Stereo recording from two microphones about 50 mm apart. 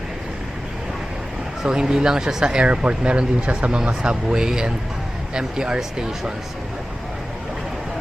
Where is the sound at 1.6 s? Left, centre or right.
Centre.